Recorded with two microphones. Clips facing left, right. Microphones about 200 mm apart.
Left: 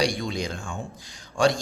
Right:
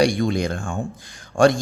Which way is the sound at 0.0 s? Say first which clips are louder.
Right 7 dB; 55° right (ahead or behind).